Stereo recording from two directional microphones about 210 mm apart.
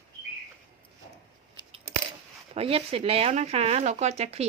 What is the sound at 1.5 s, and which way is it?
Coin, 25° right (ahead or behind).